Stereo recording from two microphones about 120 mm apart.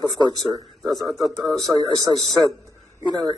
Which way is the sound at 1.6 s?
35° right (ahead or behind).